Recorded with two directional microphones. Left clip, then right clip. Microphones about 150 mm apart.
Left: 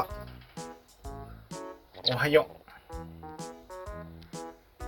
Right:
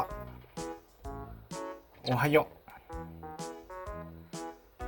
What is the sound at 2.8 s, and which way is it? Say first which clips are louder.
Music: even; centre (ahead or behind).